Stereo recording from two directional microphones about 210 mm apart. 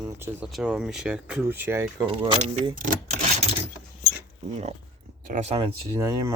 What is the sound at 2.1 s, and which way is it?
Speech, 25° right (ahead or behind).